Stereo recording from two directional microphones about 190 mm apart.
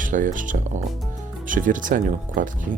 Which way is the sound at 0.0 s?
45° right (ahead or behind).